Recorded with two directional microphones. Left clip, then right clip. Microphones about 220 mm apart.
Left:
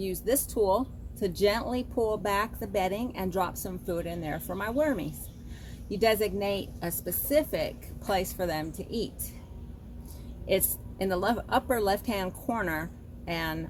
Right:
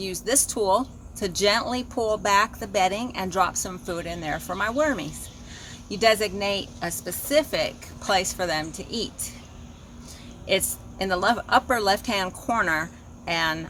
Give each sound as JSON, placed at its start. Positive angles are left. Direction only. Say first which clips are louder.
{"t": 0.0, "sound": "speech", "louder": "right 3 dB", "side_deg": -10}
{"t": 10.4, "sound": "speech", "louder": "right 4 dB", "side_deg": -5}